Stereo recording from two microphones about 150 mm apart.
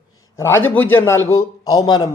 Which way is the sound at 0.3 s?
15° left (ahead or behind).